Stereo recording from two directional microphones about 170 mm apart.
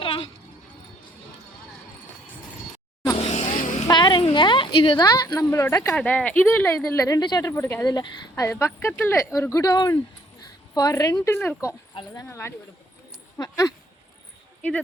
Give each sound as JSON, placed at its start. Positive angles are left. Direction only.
{"t": 3.2, "sound": "vehicle", "side_deg": 40}
{"t": 3.8, "sound": "speech", "side_deg": 25}
{"t": 5.9, "sound": "a woman's voice", "side_deg": 5}